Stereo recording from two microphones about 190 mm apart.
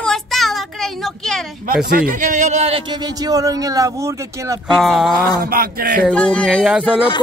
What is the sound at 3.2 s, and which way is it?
Speech, 20° right (ahead or behind).